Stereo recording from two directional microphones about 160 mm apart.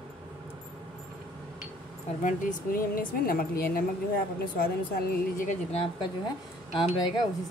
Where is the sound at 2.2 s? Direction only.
60° left (ahead or behind).